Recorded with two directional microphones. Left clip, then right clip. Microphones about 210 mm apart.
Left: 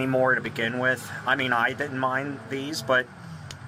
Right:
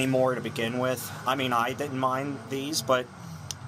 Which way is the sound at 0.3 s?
15° left (ahead or behind).